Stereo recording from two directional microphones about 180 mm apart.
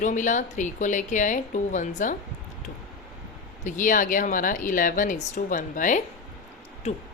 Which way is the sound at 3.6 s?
45° left (ahead or behind).